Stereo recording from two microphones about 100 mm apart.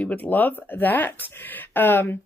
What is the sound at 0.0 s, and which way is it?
Speech, 15° left (ahead or behind).